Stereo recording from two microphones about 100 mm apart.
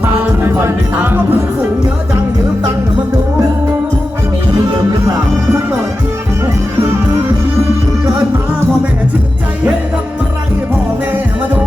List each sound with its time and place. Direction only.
0.4 s music: 25° right (ahead or behind)